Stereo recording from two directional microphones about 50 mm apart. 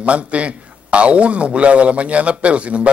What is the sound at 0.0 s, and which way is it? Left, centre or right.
A man's voice, right.